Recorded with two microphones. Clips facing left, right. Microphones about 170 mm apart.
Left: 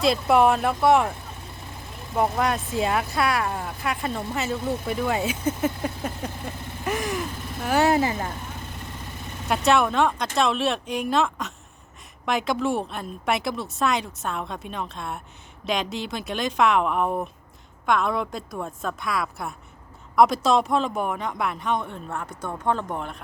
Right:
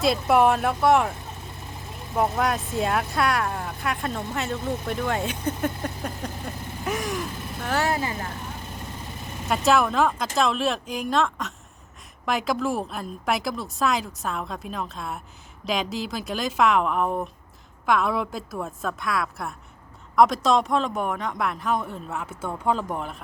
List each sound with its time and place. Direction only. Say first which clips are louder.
0.0 s speech: left 1 dB; centre (ahead or behind)
2.1 s speech: even; centre (ahead or behind)
7.7 s speech: left 5 dB; 20° left (ahead or behind)
9.5 s speech: even; centre (ahead or behind)